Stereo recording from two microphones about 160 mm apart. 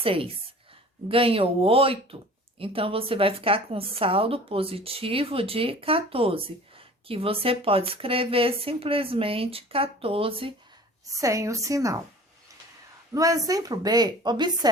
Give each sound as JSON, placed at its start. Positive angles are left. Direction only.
{"t": 0.0, "sound": "a woman's voice", "side_deg": -35}
{"t": 11.0, "sound": "a woman's voice", "side_deg": -20}
{"t": 13.1, "sound": "a woman's voice", "side_deg": -20}